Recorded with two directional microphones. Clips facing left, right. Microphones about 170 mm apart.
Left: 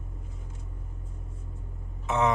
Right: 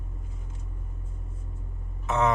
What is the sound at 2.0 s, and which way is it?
Speech, 15° left (ahead or behind).